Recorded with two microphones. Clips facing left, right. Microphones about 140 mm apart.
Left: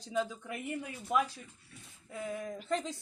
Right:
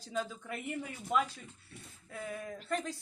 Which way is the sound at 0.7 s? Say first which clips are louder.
Even; centre (ahead or behind).